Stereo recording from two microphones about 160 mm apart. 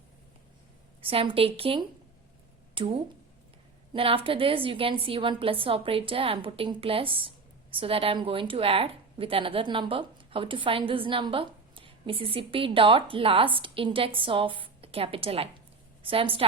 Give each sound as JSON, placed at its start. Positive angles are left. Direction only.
{"t": 1.0, "sound": "a woman's voice", "side_deg": -35}